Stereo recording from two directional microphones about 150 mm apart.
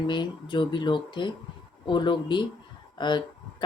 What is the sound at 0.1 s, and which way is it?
Speech, 30° left (ahead or behind).